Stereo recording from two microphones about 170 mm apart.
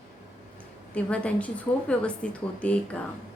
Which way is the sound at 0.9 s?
5° left (ahead or behind).